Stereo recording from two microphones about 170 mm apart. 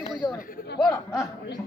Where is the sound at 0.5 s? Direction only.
75° left (ahead or behind).